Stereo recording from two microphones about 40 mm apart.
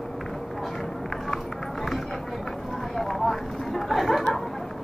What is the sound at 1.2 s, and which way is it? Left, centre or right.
Run, centre.